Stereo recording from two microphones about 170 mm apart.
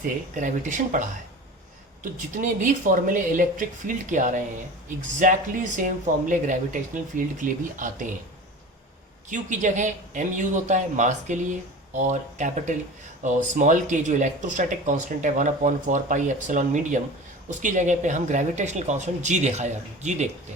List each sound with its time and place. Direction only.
0.3 s speech: 50° right (ahead or behind)
2.3 s speech: 50° right (ahead or behind)
9.3 s speech: 45° right (ahead or behind)